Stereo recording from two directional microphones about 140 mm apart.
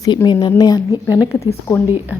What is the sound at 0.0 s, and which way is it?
Speech, 30° left (ahead or behind).